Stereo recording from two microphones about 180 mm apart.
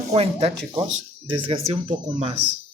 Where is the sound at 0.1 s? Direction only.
35° right (ahead or behind).